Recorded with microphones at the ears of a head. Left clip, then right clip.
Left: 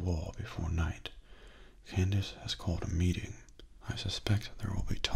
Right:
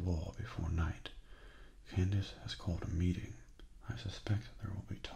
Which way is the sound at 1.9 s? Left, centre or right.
Left.